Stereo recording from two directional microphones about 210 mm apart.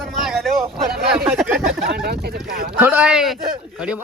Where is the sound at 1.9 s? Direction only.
50° right (ahead or behind).